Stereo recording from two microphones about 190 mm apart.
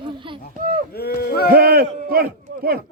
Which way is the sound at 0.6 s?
45° right (ahead or behind).